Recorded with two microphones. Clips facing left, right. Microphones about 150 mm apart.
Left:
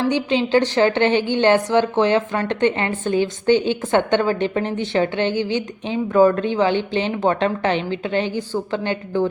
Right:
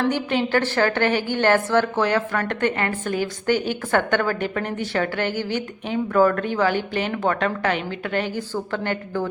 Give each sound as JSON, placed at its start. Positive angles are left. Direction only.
{"t": 0.1, "sound": "a woman's voice", "side_deg": 20}